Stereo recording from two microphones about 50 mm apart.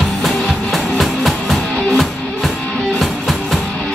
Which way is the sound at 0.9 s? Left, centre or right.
Centre.